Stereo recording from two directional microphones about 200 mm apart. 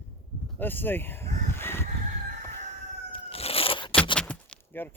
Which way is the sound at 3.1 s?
30° left (ahead or behind).